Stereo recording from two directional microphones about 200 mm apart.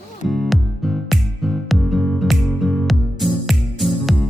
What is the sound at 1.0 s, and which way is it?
Music, centre (ahead or behind).